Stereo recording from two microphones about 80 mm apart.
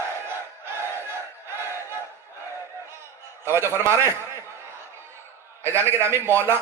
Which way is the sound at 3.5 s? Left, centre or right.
Right.